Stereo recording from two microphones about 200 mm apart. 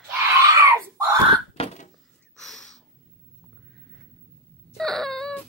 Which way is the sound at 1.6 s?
30° left (ahead or behind).